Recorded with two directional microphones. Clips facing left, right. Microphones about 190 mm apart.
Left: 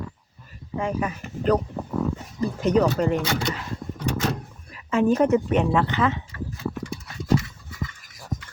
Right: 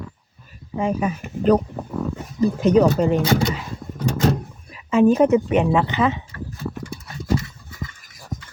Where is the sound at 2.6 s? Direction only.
25° right (ahead or behind).